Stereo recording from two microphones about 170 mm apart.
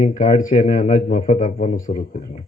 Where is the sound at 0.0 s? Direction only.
50° left (ahead or behind).